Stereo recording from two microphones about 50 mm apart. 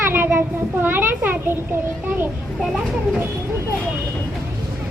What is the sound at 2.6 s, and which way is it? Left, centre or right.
Speech, centre.